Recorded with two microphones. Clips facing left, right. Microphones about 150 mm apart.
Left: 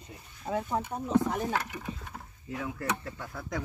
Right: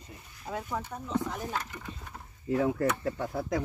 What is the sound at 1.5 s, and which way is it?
Speech, 75° left (ahead or behind).